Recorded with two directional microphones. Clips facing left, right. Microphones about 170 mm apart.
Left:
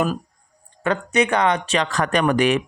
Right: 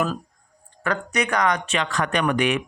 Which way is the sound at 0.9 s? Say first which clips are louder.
Left 5 dB; 25° left (ahead or behind).